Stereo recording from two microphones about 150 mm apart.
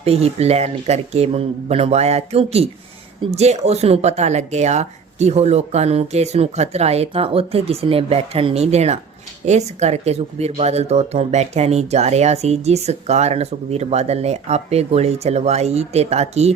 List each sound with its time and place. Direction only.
0.0 s speech: 45° right (ahead or behind)